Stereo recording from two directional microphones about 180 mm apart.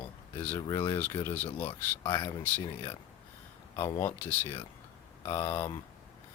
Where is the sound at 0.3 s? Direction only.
15° left (ahead or behind).